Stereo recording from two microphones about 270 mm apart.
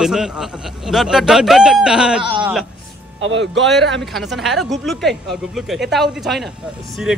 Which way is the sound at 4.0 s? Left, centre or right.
Centre.